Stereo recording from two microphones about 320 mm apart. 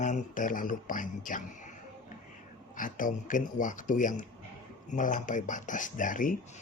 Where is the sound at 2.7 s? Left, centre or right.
Left.